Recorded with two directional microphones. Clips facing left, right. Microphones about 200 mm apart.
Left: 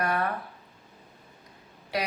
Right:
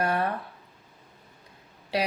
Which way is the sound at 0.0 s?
30° right (ahead or behind).